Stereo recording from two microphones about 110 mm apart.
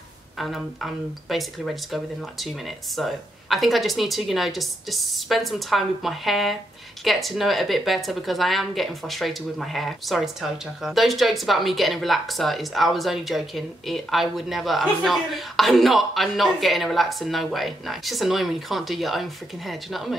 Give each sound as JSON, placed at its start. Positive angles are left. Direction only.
{"t": 0.4, "sound": "a woman's voice", "side_deg": 0}